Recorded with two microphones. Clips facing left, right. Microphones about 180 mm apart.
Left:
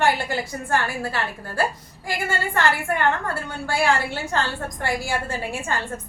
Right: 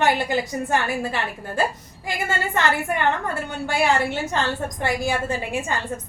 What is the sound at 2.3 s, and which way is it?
A woman's voice, 20° right (ahead or behind).